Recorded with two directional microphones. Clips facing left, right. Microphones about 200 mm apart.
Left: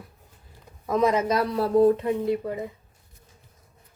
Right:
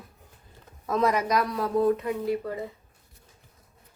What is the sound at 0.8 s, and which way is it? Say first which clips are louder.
Speech: left 3 dB; 15° left (ahead or behind).